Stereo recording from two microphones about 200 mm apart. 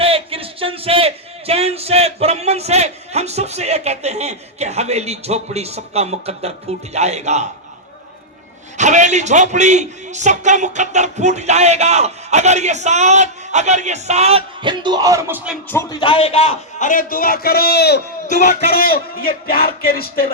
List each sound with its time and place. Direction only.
0.0 s a sound: 30° right (ahead or behind)
8.8 s a man's voice: 35° right (ahead or behind); by 15.4 s 15° right (ahead or behind)
15.7 s a man's voice: 15° left (ahead or behind); by 18.0 s 55° left (ahead or behind)
18.3 s music: 45° left (ahead or behind)